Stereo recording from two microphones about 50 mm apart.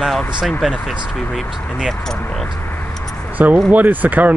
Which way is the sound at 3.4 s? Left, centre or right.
Right.